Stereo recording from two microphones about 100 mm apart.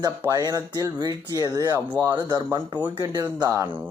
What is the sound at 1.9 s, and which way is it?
Speech, 25° right (ahead or behind).